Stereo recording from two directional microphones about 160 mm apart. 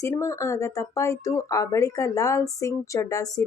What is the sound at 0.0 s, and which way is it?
A woman's voice, 20° left (ahead or behind).